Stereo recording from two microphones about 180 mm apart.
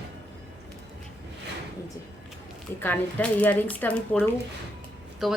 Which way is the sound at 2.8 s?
10° left (ahead or behind).